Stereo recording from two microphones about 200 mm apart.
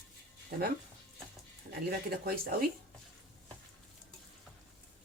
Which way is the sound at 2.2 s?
50° right (ahead or behind).